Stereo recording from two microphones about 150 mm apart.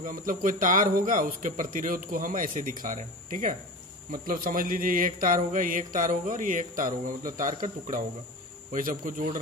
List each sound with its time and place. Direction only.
0.0 s speech: 65° right (ahead or behind)